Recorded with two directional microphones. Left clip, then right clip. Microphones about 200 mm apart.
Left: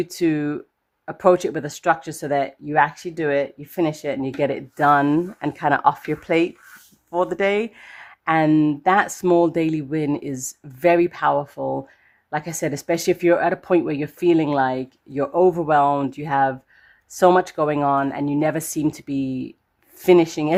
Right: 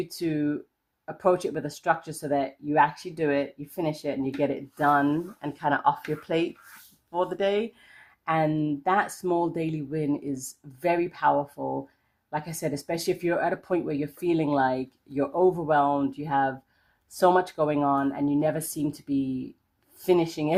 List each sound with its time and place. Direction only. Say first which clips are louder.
0.1 s speech: left 7 dB; 40° left (ahead or behind)